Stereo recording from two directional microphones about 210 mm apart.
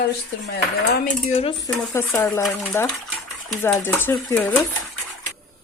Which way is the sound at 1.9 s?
10° left (ahead or behind).